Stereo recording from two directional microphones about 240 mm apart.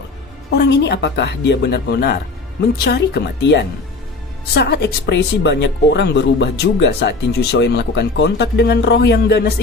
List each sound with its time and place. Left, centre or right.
0.5 s speech: left